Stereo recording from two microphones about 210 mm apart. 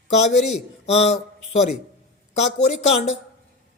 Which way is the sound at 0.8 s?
30° left (ahead or behind).